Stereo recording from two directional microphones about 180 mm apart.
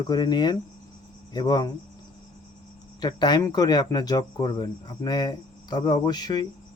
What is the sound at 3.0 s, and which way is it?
Speech, 25° left (ahead or behind).